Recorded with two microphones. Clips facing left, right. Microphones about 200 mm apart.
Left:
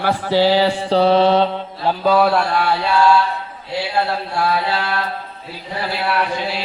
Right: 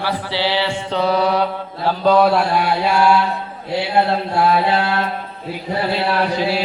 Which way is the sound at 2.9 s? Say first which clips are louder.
Left 1 dB; 15° right (ahead or behind).